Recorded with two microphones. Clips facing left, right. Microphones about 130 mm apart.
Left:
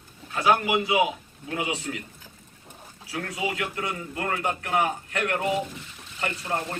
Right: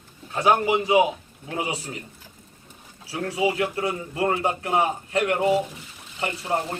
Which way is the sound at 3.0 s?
35° right (ahead or behind).